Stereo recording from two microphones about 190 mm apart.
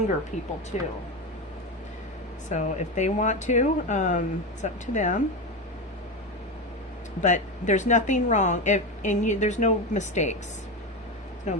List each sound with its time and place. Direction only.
0.7 s a woman's voice: 35° left (ahead or behind)
2.5 s a woman's voice: 40° left (ahead or behind)
7.2 s a woman's voice: 40° left (ahead or behind)
11.5 s a woman's voice: 40° left (ahead or behind)